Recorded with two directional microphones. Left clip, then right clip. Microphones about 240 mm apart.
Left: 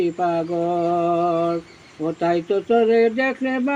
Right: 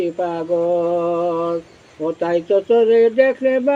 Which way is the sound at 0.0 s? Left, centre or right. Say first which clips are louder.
Even; centre.